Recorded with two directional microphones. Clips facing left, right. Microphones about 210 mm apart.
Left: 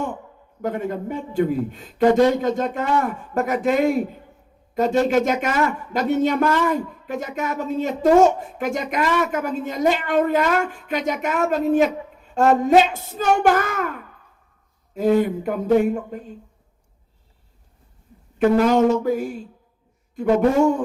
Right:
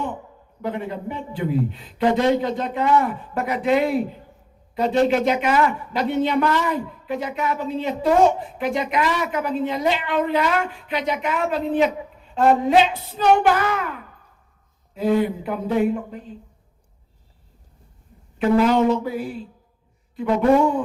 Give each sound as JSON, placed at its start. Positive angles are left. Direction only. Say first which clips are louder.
{"t": 0.6, "sound": "a man's voice", "louder": "left 2 dB", "side_deg": 45}
{"t": 14.9, "sound": "a man's voice", "louder": "left 2 dB", "side_deg": 45}
{"t": 18.3, "sound": "a man's voice", "louder": "left 1 dB", "side_deg": 45}